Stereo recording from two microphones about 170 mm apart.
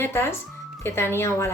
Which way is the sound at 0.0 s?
15° left (ahead or behind).